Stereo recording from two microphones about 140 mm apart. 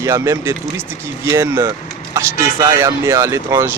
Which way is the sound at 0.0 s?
20° right (ahead or behind).